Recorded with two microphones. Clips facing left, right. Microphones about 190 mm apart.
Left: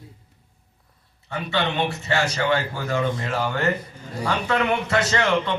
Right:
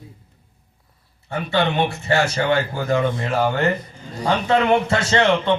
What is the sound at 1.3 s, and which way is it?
A man's voice, 45° right (ahead or behind).